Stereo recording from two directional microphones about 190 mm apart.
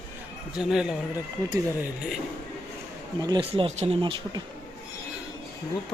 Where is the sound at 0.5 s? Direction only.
5° right (ahead or behind).